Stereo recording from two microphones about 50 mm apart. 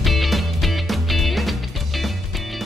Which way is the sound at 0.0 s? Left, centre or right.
Centre.